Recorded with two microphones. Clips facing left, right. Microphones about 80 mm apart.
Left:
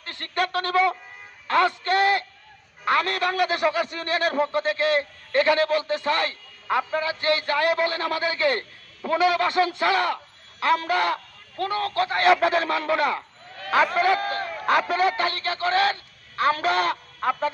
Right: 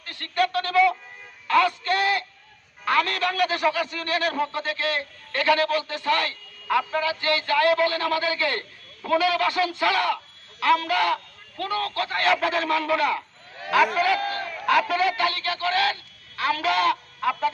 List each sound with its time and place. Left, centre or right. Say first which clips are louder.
0.0 s a man's voice: right 2 dB; left